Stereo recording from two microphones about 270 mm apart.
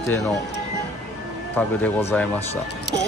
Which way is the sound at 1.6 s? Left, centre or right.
Centre.